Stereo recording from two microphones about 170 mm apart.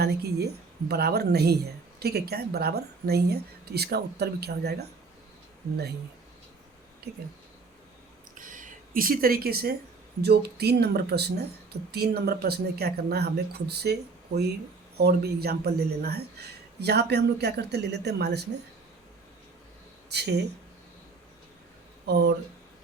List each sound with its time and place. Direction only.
0.0 s speech: 70° right (ahead or behind)
7.1 s speech: 75° right (ahead or behind)
8.4 s a sound: 50° right (ahead or behind)
10.2 s speech: 70° right (ahead or behind)
20.1 s speech: 75° right (ahead or behind)